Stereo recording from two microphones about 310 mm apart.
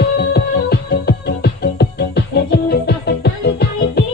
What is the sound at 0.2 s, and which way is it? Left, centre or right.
Music, left.